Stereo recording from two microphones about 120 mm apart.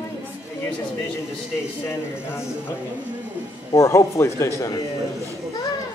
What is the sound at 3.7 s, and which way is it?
Speech, 25° left (ahead or behind).